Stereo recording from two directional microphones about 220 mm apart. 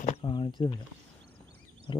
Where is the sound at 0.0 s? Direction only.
30° left (ahead or behind).